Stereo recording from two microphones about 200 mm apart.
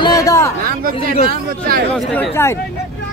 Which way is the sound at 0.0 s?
20° left (ahead or behind).